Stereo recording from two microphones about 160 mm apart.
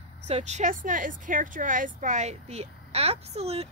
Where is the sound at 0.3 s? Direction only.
45° right (ahead or behind).